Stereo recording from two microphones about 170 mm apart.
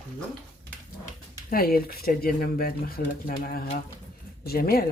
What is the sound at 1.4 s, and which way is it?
Speech, 60° left (ahead or behind).